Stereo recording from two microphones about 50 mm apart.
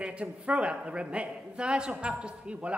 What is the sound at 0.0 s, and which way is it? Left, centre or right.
A woman's voice, right.